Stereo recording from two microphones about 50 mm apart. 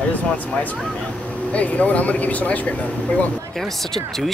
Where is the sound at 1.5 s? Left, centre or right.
Left.